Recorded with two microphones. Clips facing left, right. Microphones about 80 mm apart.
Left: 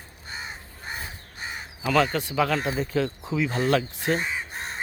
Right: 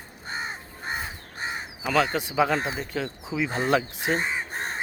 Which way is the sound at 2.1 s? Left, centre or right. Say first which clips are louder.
Right 1 dB; centre.